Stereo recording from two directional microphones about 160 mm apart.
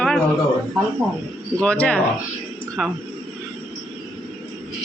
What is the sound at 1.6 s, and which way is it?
Speech, 5° left (ahead or behind).